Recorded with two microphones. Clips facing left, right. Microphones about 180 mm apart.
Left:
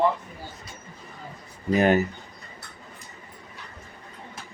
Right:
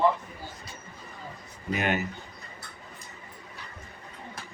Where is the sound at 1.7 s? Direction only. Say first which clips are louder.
Left 9 dB; 35° left (ahead or behind).